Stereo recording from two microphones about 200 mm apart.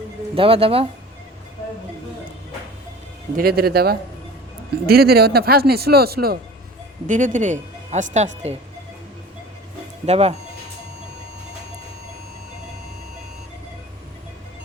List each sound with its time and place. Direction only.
0.3 s speech: 25° right (ahead or behind)
3.3 s a woman's voice: 50° right (ahead or behind); by 8.5 s 35° right (ahead or behind)
10.1 s a woman's voice: 30° right (ahead or behind)